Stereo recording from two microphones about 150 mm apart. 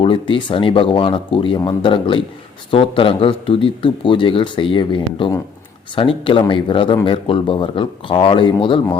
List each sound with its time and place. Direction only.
0.0 s speech: 35° left (ahead or behind)